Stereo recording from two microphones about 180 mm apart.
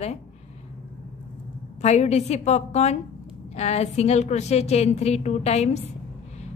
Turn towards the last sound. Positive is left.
turn(degrees=35)  # may be behind; listen again after turning